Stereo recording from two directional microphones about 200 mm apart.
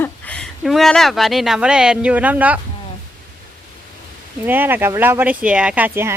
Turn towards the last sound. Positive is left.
turn(degrees=-10)  # may be behind; listen again after turning